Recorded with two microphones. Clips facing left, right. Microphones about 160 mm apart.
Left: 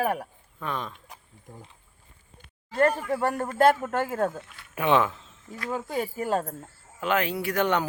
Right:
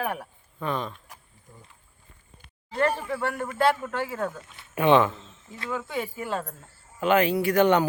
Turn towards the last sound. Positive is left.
turn(degrees=0)  # may be behind; listen again after turning